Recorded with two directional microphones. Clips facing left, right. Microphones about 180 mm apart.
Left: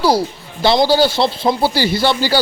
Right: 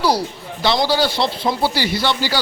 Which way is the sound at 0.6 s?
30° left (ahead or behind).